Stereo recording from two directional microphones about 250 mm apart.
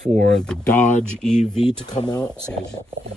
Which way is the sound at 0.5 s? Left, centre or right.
Centre.